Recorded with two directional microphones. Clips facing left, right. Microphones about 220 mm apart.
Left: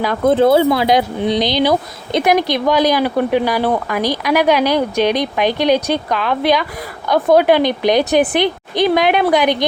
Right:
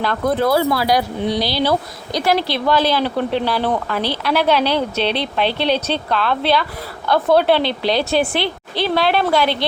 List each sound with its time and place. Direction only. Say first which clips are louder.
0.3 s speech: left 6 dB; 25° left (ahead or behind)